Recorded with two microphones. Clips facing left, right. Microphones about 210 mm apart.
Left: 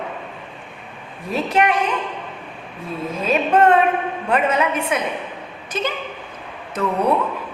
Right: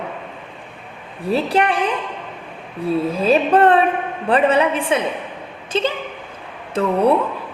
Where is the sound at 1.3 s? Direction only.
35° right (ahead or behind).